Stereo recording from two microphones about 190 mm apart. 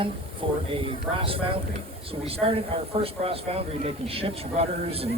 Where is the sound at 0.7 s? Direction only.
30° right (ahead or behind).